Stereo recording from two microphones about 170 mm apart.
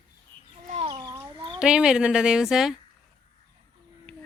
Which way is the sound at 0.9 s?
20° right (ahead or behind).